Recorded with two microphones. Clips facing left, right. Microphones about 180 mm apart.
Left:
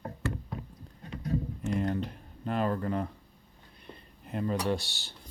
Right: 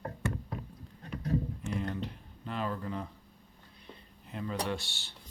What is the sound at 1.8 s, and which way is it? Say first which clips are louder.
Speech: left 5 dB; 45° left (ahead or behind).